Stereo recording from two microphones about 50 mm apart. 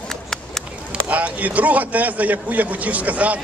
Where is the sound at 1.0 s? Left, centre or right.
Right.